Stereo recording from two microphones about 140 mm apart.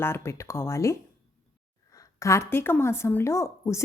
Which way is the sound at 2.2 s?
20° left (ahead or behind).